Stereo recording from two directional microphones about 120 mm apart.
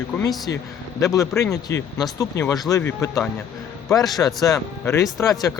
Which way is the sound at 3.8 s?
Centre (ahead or behind).